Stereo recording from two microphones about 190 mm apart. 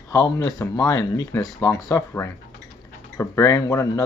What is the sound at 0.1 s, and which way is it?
Speech, 15° left (ahead or behind).